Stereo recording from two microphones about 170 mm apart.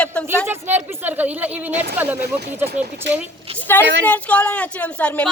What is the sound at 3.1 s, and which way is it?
Speech, 90° right.